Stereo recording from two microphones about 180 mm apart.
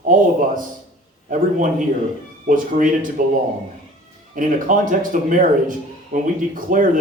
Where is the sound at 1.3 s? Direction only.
45° right (ahead or behind).